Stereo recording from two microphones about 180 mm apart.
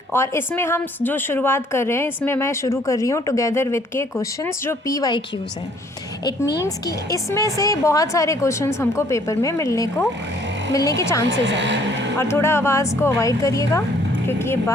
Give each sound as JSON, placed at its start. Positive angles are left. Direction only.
{"t": 0.1, "sound": "a woman's voice", "side_deg": 15}
{"t": 6.6, "sound": "a woman's voice", "side_deg": 20}
{"t": 11.3, "sound": "speech", "side_deg": -85}
{"t": 12.3, "sound": "a woman's voice", "side_deg": 15}